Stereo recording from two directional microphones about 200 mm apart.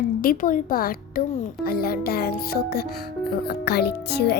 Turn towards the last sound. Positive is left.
turn(degrees=55)  # may be behind; listen again after turning